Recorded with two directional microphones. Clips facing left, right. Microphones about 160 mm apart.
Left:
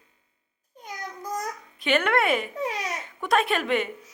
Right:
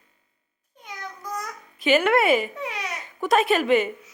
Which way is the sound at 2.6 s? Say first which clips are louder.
Left 3 dB; 40° left (ahead or behind).